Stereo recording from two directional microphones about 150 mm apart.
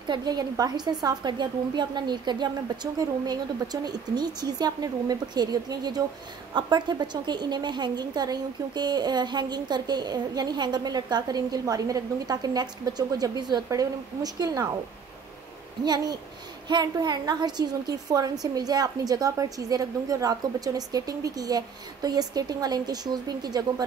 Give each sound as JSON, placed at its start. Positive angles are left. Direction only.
{"t": 0.1, "sound": "a woman's voice", "side_deg": -25}
{"t": 15.8, "sound": "a woman's voice", "side_deg": -25}